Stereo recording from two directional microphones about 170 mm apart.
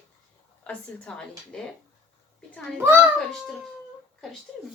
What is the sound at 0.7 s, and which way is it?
Speech, 5° left (ahead or behind).